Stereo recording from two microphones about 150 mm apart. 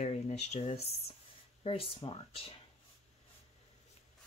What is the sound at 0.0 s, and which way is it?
Speech, 45° left (ahead or behind).